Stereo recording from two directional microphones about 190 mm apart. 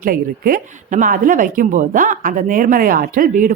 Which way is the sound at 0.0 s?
50° right (ahead or behind).